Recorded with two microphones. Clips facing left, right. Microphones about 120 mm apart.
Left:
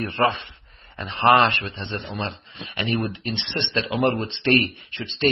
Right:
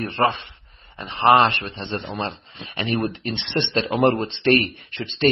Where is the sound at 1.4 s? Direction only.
35° right (ahead or behind).